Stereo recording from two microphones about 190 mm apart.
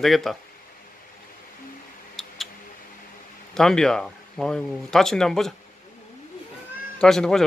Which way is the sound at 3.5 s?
5° left (ahead or behind).